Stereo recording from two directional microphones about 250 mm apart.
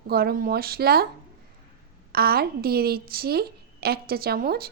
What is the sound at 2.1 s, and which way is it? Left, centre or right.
A woman's voice, right.